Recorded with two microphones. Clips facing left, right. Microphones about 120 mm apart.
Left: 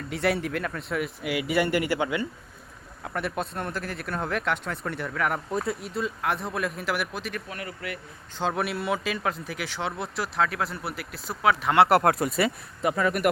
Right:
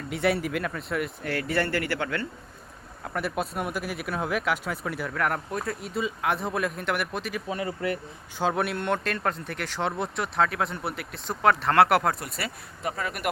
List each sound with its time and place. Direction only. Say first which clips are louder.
0.1 s speech: right 1 dB; centre (ahead or behind); by 2.2 s 15° left (ahead or behind)
3.0 s speech: right 1 dB; centre (ahead or behind)
7.4 s speech: right 7 dB; 25° right (ahead or behind)
8.4 s speech: right 1 dB; centre (ahead or behind)
12.1 s speech: left 4 dB; 55° left (ahead or behind)